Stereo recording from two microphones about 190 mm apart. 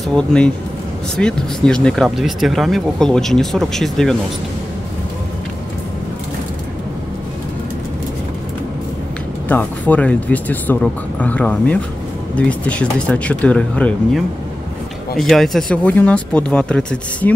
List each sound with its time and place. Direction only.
0.0 s speech: 5° left (ahead or behind)
9.5 s speech: 10° left (ahead or behind)